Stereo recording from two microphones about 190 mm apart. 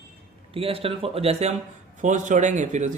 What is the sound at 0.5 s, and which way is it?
Speech, 30° right (ahead or behind).